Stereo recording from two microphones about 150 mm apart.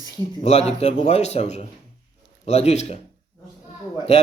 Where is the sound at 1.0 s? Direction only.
45° left (ahead or behind).